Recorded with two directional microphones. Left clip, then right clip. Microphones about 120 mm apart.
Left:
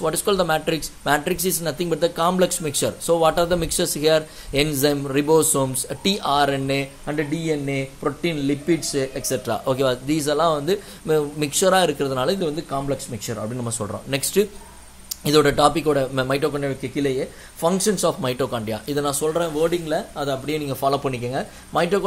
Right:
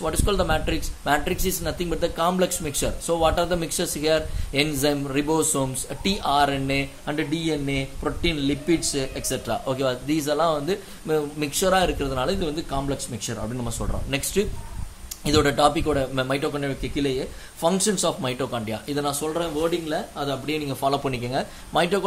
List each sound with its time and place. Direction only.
0.0 s speech: 35° left (ahead or behind)
7.1 s a man's voice: 25° left (ahead or behind); by 20.7 s 40° left (ahead or behind)
21.0 s a man's voice: 15° left (ahead or behind)